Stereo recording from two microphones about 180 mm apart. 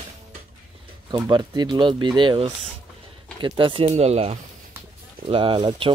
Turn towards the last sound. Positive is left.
turn(degrees=-25)  # may be behind; listen again after turning